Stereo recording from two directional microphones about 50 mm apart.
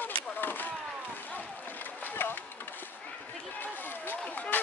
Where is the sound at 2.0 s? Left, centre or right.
Left.